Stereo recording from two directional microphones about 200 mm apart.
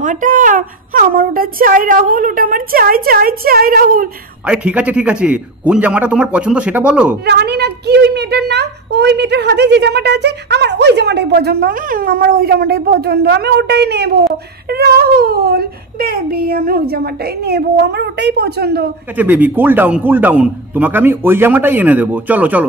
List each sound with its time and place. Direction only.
0.0 s a child's voice: 40° right (ahead or behind)
4.5 s a man's voice: 5° right (ahead or behind)
7.2 s a woman's voice: 55° right (ahead or behind)
19.1 s a man's voice: 10° right (ahead or behind)